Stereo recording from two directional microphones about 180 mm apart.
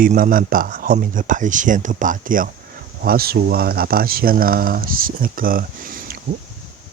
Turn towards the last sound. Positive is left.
turn(degrees=-55)  # may be behind; listen again after turning